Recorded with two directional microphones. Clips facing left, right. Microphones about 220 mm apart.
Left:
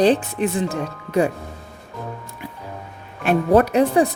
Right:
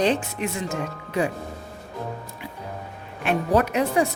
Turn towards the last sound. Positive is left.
turn(degrees=45)  # may be behind; listen again after turning